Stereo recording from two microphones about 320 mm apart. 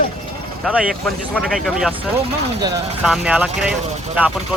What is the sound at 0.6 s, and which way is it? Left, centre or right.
Speech, centre.